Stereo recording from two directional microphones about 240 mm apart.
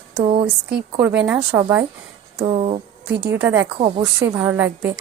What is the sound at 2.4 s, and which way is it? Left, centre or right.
Speech, right.